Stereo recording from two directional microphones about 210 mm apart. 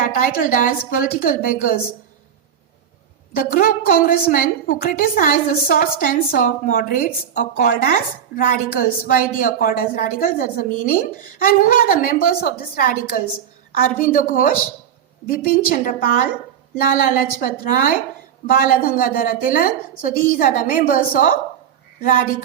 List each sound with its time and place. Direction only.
0.0 s a woman's voice: 40° left (ahead or behind)
3.3 s a woman's voice: 40° left (ahead or behind)